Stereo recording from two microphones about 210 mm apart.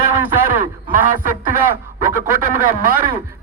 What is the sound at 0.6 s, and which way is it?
Speech, 40° right (ahead or behind).